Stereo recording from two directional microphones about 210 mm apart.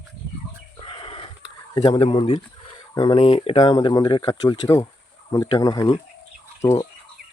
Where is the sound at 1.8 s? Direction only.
25° left (ahead or behind).